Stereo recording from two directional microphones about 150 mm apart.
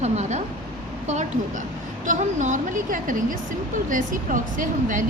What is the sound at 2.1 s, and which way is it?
Speech, 55° right (ahead or behind).